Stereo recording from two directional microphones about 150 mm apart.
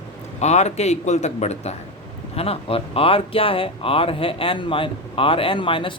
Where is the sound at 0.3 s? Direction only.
50° left (ahead or behind).